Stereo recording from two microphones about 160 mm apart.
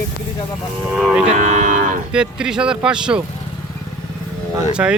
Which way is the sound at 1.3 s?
50° right (ahead or behind).